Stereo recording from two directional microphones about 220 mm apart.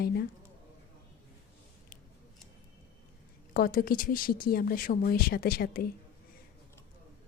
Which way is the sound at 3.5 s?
40° left (ahead or behind).